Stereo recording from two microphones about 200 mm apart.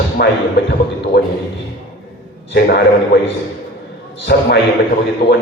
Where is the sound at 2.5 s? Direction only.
55° left (ahead or behind).